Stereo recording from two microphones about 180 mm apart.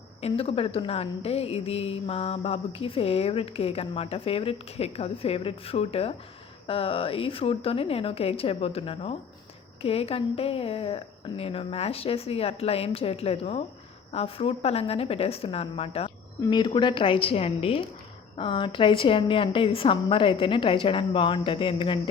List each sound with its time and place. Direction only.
0.2 s a woman's voice: 35° left (ahead or behind)